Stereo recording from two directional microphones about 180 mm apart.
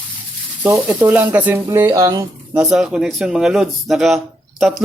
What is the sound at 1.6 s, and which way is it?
Speech, 20° right (ahead or behind).